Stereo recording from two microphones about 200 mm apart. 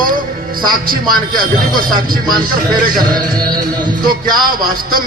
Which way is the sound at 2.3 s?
20° right (ahead or behind).